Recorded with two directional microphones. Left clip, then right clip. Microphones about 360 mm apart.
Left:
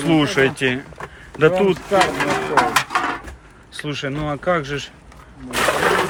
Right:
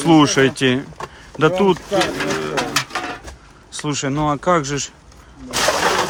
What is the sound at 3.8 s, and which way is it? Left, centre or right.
Speech, centre.